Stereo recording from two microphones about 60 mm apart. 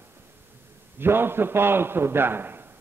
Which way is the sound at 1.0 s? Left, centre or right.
Right.